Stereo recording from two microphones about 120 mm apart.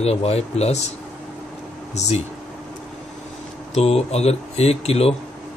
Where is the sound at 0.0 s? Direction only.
60° left (ahead or behind).